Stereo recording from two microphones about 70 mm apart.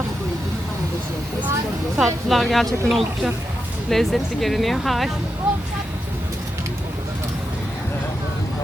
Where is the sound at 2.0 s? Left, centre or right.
Centre.